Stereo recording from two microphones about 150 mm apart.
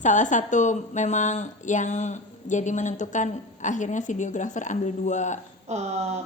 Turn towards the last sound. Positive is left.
turn(degrees=-45)  # may be behind; listen again after turning